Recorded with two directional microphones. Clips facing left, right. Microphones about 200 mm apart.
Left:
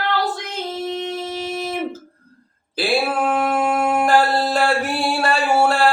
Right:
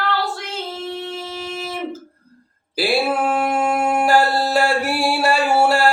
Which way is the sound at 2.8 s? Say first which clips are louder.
Right 1 dB; 10° right (ahead or behind).